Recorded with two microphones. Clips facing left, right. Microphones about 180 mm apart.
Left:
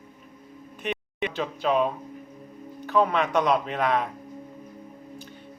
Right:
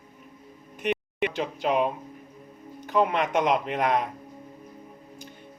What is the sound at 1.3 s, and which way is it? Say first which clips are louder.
Speech: left 3 dB; 15° right (ahead or behind).